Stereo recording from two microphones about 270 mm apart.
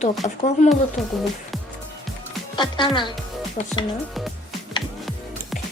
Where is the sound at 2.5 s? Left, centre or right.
Centre.